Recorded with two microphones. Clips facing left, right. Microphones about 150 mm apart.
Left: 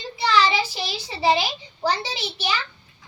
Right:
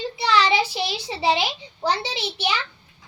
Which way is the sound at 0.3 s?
70° right (ahead or behind).